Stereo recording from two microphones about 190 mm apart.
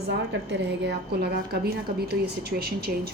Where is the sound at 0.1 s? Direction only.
60° right (ahead or behind).